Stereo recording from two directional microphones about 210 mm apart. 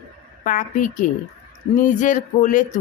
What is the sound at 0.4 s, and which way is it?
Speech, 40° left (ahead or behind).